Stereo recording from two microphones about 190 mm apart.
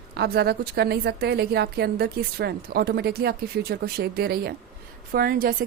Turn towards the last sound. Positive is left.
turn(degrees=-50)  # may be behind; listen again after turning